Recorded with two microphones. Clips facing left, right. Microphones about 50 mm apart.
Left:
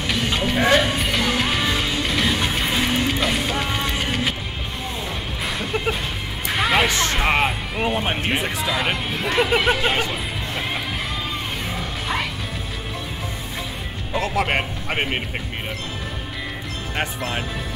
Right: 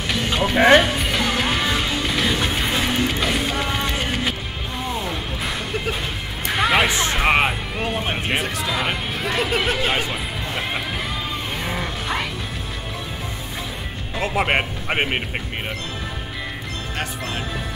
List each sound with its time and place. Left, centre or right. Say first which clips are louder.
0.0 s music: right 1 dB; centre
0.6 s speech: right 5 dB; right
0.9 s music: even; centre
6.5 s horse: right 1 dB; centre
6.9 s a sound: even; centre
7.2 s speech: right 3 dB; centre
7.7 s speech: left 2 dB; centre
11.6 s music: right 1 dB; centre
14.2 s speech: right 3 dB; right